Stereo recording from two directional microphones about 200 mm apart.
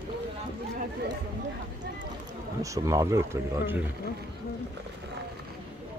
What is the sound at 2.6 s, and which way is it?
Speech, 15° right (ahead or behind).